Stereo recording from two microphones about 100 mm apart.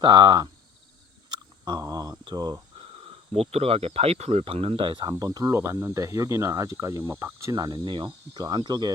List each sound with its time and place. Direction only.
0.0 s speech: 45° right (ahead or behind)
1.3 s a sound: 45° right (ahead or behind)
2.2 s speech: 45° right (ahead or behind)
3.3 s speech: 90° right; by 5.1 s 55° right (ahead or behind)
5.1 s speech: 35° right (ahead or behind)
5.5 s speech: 25° right (ahead or behind); by 8.9 s 45° right (ahead or behind)